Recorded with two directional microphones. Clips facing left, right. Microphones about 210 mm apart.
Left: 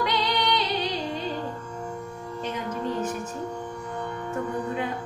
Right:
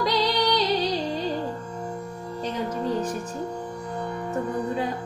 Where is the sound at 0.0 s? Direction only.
35° right (ahead or behind).